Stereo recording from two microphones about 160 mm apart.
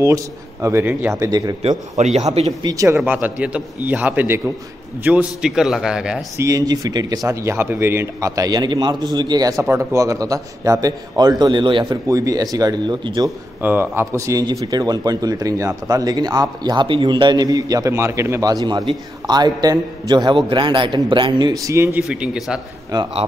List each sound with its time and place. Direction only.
0.0 s speech: 20° right (ahead or behind)
2.0 s a man's voice: 45° right (ahead or behind)
2.6 s speech: 20° right (ahead or behind)
3.0 s a man's voice: 10° right (ahead or behind)
6.3 s speech: 20° right (ahead or behind)
13.6 s speech: 15° right (ahead or behind)
22.0 s a man's voice: 5° right (ahead or behind)
22.9 s speech: 25° right (ahead or behind)